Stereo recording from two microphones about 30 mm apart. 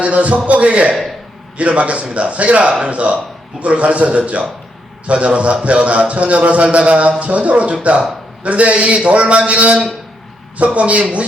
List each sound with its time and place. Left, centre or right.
0.0 s a man's voice: right